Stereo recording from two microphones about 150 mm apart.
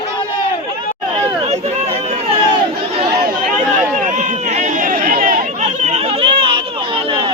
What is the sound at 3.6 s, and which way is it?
Chatter, 55° right (ahead or behind).